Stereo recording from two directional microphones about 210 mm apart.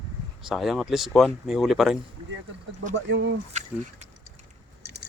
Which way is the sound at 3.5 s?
35° right (ahead or behind).